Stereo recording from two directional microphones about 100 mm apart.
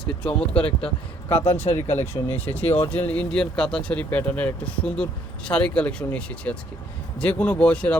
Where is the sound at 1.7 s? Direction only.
25° left (ahead or behind).